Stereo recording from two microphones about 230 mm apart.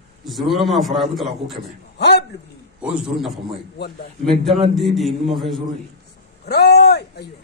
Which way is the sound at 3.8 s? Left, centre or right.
Left.